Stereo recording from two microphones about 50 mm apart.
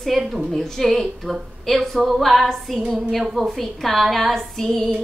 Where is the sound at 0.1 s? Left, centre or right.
Centre.